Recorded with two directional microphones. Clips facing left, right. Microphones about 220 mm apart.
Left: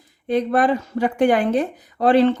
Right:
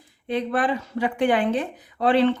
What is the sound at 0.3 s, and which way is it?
Speech, 45° left (ahead or behind).